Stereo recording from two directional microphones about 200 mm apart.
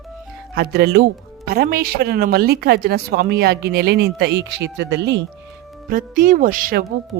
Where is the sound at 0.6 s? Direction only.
50° right (ahead or behind).